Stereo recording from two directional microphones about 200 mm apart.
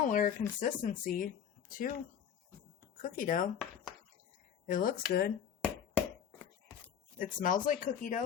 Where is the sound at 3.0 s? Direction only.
45° left (ahead or behind).